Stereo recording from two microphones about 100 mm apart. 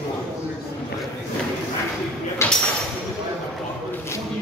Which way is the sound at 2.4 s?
25° left (ahead or behind).